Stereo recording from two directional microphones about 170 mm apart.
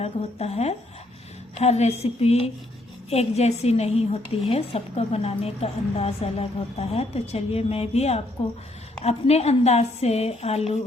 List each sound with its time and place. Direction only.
0.0 s a woman's voice: 40° left (ahead or behind)